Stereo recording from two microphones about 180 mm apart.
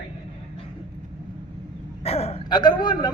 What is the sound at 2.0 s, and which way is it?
A man's voice, 35° left (ahead or behind).